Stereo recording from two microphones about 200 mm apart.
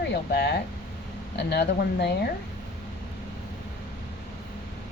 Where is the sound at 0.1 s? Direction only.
60° left (ahead or behind).